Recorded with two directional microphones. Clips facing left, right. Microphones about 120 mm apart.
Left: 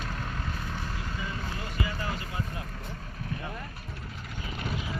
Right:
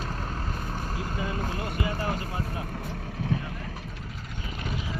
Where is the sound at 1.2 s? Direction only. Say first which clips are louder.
Right 7 dB; 50° right (ahead or behind).